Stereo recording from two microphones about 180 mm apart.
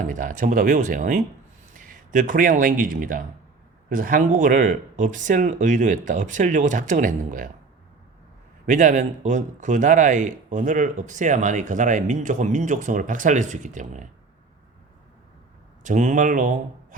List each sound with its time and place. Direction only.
0.0 s speech: 45° right (ahead or behind)
8.6 s speech: 45° right (ahead or behind)
15.8 s speech: 45° right (ahead or behind)